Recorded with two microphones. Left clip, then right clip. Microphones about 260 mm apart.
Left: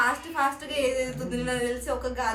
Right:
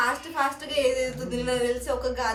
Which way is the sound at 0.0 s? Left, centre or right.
Centre.